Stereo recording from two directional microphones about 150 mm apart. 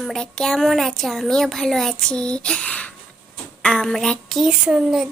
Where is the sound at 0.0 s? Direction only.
5° left (ahead or behind).